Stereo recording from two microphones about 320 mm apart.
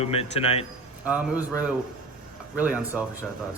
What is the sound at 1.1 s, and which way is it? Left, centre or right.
Speech, centre.